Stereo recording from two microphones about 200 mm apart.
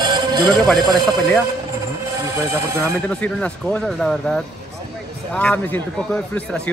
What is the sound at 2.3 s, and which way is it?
Speech, 15° right (ahead or behind).